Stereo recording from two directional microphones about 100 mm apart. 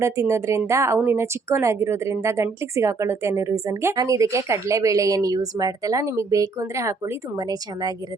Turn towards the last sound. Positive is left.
turn(degrees=-40)  # may be behind; listen again after turning